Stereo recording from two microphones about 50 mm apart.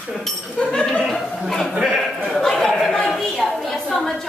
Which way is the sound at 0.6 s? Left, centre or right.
Centre.